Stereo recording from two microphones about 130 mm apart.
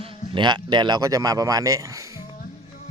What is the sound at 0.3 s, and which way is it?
Speech, 35° right (ahead or behind).